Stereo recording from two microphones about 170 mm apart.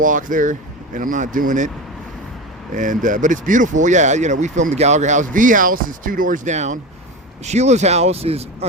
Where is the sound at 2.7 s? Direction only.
50° right (ahead or behind).